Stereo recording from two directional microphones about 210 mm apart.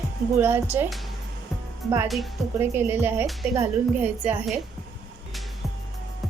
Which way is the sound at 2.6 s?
10° right (ahead or behind).